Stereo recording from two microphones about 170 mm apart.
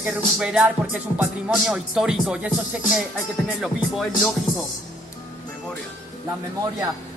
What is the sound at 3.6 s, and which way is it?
Speech, centre (ahead or behind).